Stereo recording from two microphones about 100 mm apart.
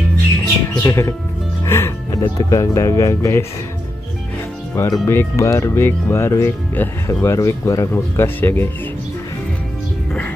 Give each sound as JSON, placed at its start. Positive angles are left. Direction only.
{"t": 0.7, "sound": "speech", "side_deg": 30}
{"t": 4.7, "sound": "speech", "side_deg": 30}
{"t": 7.9, "sound": "speech", "side_deg": 20}